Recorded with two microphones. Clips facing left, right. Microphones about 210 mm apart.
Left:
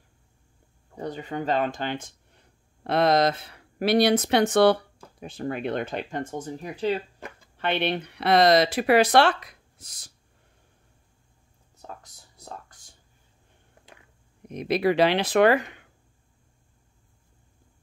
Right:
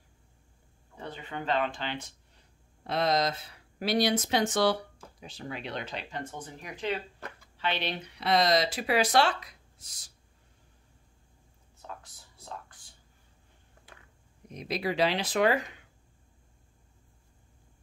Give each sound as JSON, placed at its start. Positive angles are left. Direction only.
{"t": 0.9, "sound": "speech", "side_deg": 40}
{"t": 7.5, "sound": "speech", "side_deg": 55}
{"t": 11.8, "sound": "whispering", "side_deg": 40}
{"t": 14.5, "sound": "speech", "side_deg": 65}